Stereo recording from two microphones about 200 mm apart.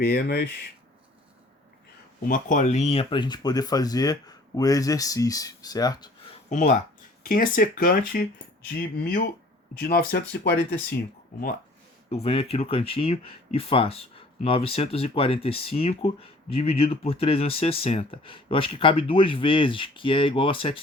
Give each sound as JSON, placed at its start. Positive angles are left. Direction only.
{"t": 0.0, "sound": "speech", "side_deg": 50}
{"t": 2.2, "sound": "speech", "side_deg": 40}
{"t": 6.3, "sound": "speech", "side_deg": 35}
{"t": 12.0, "sound": "speech", "side_deg": 30}